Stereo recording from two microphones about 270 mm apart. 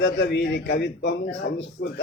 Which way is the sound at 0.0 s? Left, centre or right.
Left.